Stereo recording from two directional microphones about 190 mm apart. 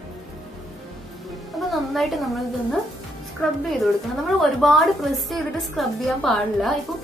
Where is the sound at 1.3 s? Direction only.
Centre (ahead or behind).